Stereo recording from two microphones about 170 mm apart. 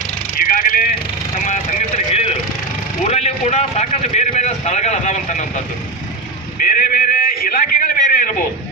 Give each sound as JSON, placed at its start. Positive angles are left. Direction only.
{"t": 0.3, "sound": "speech", "side_deg": 55}
{"t": 2.0, "sound": "vehicle", "side_deg": 35}
{"t": 3.0, "sound": "speech", "side_deg": 40}
{"t": 6.6, "sound": "a man's voice", "side_deg": 55}